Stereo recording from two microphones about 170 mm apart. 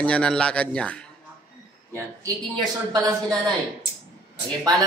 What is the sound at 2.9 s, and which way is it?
Speech, 20° right (ahead or behind).